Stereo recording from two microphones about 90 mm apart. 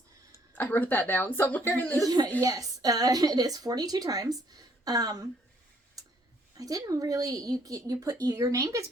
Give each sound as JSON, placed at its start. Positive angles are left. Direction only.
{"t": 0.5, "sound": "a woman's voice", "side_deg": 20}
{"t": 2.0, "sound": "a woman's voice", "side_deg": -50}
{"t": 6.0, "sound": "a sound", "side_deg": -40}
{"t": 6.6, "sound": "speech", "side_deg": -45}